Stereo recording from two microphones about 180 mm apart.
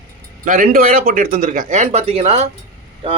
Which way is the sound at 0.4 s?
50° right (ahead or behind).